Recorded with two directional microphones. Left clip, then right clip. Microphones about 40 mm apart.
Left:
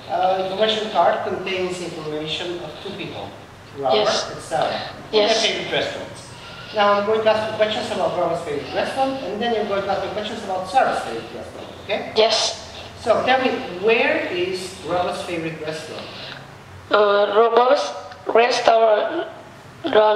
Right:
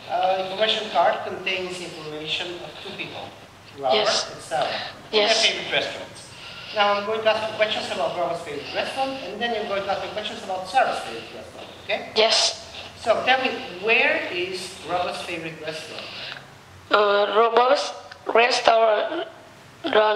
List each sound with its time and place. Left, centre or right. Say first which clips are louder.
0.1 s a man's voice: left 3 dB; right
16.9 s a sound: left 3 dB; right
19.8 s speech: left 3 dB; right